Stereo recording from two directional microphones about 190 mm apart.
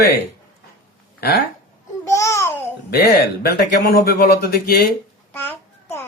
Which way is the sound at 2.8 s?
55° left (ahead or behind).